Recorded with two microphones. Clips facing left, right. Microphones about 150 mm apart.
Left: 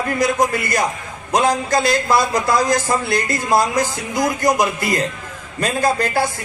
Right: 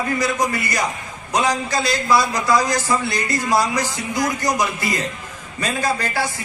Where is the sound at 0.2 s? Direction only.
50° left (ahead or behind).